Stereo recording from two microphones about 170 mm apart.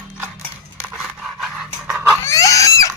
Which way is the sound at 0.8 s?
5° right (ahead or behind).